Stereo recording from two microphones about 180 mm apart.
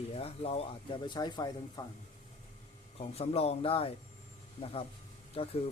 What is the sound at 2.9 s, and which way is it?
Speech, 35° left (ahead or behind).